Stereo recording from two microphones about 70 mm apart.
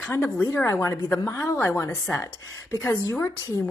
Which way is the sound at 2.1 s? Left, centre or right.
Left.